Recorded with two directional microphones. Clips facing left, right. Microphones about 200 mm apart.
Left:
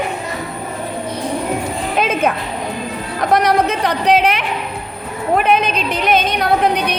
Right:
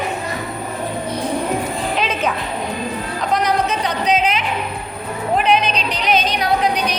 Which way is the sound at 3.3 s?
60° left (ahead or behind).